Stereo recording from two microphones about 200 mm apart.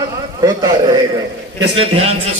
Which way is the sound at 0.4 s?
20° right (ahead or behind).